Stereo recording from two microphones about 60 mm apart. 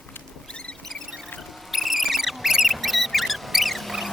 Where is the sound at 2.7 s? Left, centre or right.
Centre.